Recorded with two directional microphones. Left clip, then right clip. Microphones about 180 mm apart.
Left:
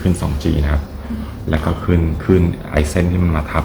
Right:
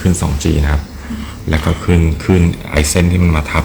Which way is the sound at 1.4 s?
50° right (ahead or behind).